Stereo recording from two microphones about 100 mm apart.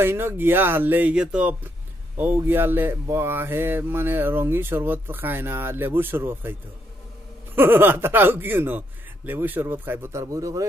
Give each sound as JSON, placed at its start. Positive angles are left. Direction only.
{"t": 0.0, "sound": "mantra", "side_deg": -25}
{"t": 7.5, "sound": "mantra", "side_deg": -20}
{"t": 10.2, "sound": "speech", "side_deg": -35}